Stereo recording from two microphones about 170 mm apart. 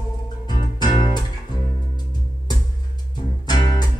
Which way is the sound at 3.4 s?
25° left (ahead or behind).